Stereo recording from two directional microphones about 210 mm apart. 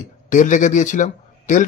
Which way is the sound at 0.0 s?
35° left (ahead or behind).